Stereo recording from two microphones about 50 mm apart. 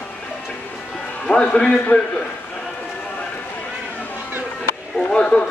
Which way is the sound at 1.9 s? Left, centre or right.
Left.